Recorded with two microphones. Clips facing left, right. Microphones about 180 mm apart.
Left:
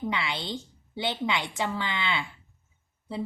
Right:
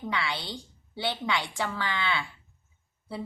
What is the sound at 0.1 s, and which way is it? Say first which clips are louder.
A woman's voice: left 1 dB; 20° left (ahead or behind).